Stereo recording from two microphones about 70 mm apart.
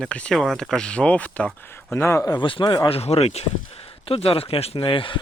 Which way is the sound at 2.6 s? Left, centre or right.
Left.